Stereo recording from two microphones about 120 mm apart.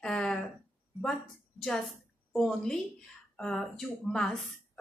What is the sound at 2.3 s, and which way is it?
Speech, 5° left (ahead or behind).